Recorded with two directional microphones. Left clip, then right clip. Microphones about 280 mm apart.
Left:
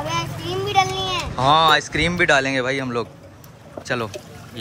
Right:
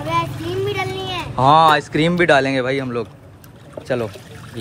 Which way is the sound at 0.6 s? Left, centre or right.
Centre.